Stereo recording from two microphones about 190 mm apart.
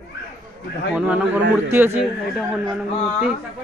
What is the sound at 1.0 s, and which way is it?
A man's voice, 5° right (ahead or behind).